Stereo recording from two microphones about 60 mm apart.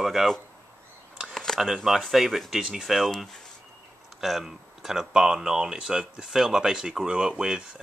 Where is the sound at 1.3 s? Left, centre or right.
Centre.